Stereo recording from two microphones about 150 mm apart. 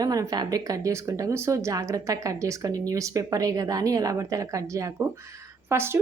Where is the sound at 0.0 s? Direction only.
25° right (ahead or behind).